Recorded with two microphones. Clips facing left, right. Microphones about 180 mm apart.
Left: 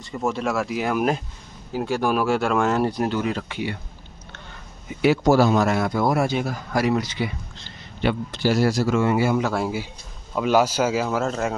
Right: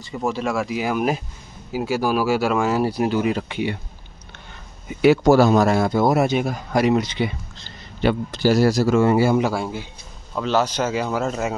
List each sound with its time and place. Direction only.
0.0 s speech: centre (ahead or behind); by 3.7 s 20° right (ahead or behind)
5.0 s speech: 60° right (ahead or behind); by 7.3 s 25° right (ahead or behind)
7.6 s a man's voice: 40° right (ahead or behind)
9.5 s speech: 5° left (ahead or behind)